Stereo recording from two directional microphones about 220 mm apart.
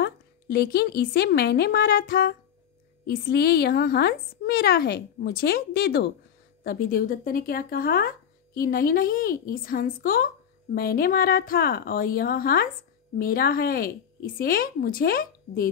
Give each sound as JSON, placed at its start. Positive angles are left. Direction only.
{"t": 0.0, "sound": "a woman's voice", "side_deg": 45}